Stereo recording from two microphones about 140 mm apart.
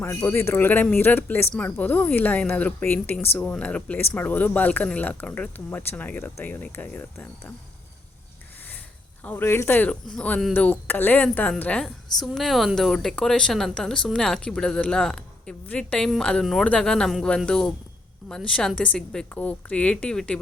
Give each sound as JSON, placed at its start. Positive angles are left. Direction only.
{"t": 0.0, "sound": "speech", "side_deg": 15}
{"t": 9.2, "sound": "speech", "side_deg": 15}